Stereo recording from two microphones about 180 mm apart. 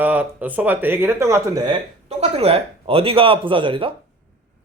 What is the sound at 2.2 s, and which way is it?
Speech, 35° right (ahead or behind).